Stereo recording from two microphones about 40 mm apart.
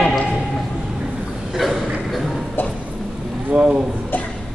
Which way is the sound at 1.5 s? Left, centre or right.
Centre.